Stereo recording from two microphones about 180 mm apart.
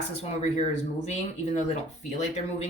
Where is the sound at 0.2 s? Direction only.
35° left (ahead or behind).